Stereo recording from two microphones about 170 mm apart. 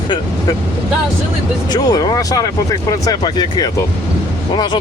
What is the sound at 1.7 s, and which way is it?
Speech, 25° left (ahead or behind).